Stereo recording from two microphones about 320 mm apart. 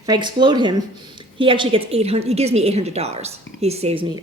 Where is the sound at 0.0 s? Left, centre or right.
Centre.